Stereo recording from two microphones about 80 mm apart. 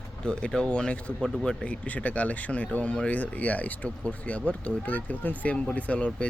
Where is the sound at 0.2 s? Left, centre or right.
Centre.